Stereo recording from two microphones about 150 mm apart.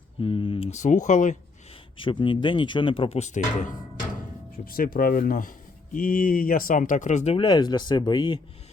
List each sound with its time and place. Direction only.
0.2 s a sound: 35° left (ahead or behind)
0.7 s speech: 55° left (ahead or behind)
2.0 s speech: 35° left (ahead or behind); by 3.8 s 55° left (ahead or behind)
4.5 s speech: 75° left (ahead or behind); by 7.3 s 50° left (ahead or behind)
7.3 s speech: 30° left (ahead or behind)